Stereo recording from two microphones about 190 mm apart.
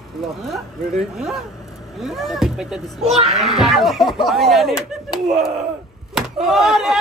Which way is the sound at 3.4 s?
Centre (ahead or behind).